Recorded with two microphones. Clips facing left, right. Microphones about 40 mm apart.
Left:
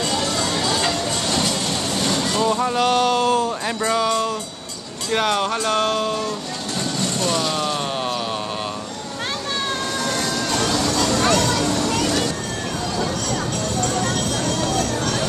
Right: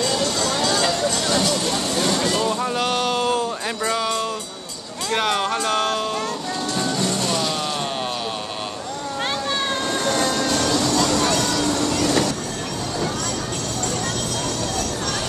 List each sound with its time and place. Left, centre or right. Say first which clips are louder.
0.6 s a sound: right 2 dB; centre
2.0 s vehicle: even; centre
5.1 s speech: left 1 dB; centre
6.8 s vehicle: left 1 dB; centre
10.0 s music: right 4 dB; centre